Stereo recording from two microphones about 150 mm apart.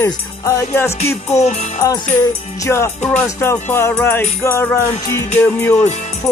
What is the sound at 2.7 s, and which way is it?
Music, 15° left (ahead or behind).